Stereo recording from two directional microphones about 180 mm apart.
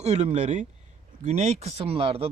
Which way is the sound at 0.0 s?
40° right (ahead or behind).